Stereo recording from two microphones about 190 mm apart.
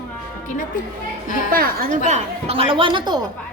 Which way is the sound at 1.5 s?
50° right (ahead or behind).